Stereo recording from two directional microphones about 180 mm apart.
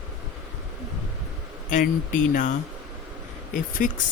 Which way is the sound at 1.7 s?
45° left (ahead or behind).